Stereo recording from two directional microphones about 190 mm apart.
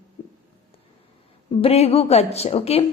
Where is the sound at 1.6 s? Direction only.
30° left (ahead or behind).